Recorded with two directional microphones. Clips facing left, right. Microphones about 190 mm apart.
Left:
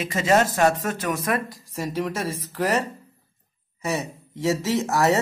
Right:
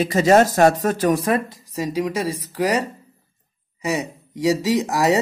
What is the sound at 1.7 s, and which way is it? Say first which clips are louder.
Speech: right 4 dB; 15° right (ahead or behind).